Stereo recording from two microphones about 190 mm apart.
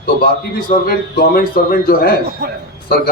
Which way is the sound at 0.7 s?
50° left (ahead or behind).